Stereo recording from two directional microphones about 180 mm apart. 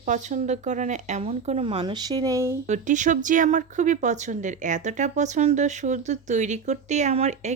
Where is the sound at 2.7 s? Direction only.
45° right (ahead or behind).